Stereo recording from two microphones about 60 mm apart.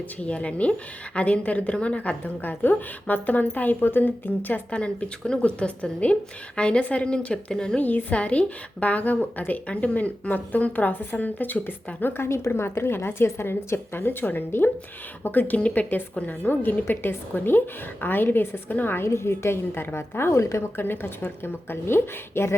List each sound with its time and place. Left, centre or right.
0.2 s speech: left
4.7 s a woman's voice: centre
7.8 s speech: left
12.1 s a woman's voice: left
20.7 s a woman's voice: left